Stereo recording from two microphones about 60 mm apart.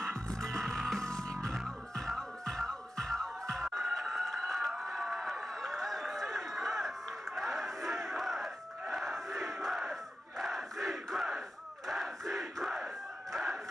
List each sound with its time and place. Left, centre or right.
0.6 s music: centre
1.2 s music: right
2.0 s music: centre
3.8 s a sound: centre
7.3 s battle cry: centre
8.9 s crowd: centre
11.9 s battle cry: centre